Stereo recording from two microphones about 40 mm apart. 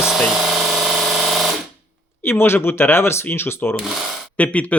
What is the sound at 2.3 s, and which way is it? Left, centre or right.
Speech, left.